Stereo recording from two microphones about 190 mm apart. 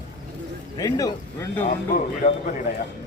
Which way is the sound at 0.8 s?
20° left (ahead or behind).